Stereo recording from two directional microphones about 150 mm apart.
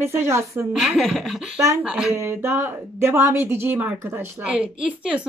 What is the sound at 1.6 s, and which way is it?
Speech, 20° right (ahead or behind).